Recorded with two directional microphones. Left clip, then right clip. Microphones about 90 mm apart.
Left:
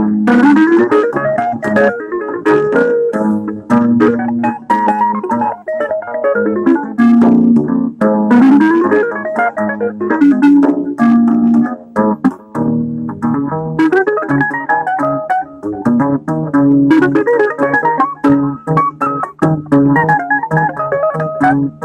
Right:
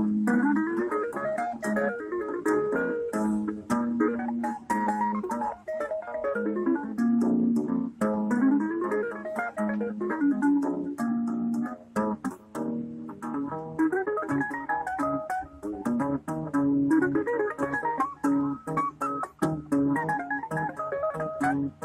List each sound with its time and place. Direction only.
0.0 s organ: 20° left (ahead or behind)
3.3 s music: 25° left (ahead or behind)
14.9 s organ: 30° left (ahead or behind)
15.8 s music: 20° left (ahead or behind)
17.8 s organ: 25° left (ahead or behind)